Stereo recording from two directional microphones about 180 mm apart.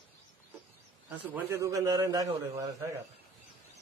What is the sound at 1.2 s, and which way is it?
A man's voice, 10° right (ahead or behind).